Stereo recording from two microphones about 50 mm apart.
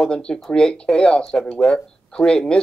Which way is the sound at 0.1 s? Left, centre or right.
Centre.